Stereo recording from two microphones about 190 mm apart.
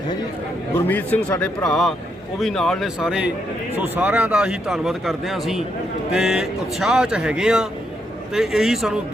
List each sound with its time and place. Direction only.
0.7 s speech: 10° left (ahead or behind)